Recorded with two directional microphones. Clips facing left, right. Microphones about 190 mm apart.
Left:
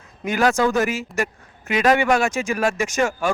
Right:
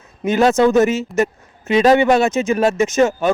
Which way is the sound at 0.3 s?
25° right (ahead or behind).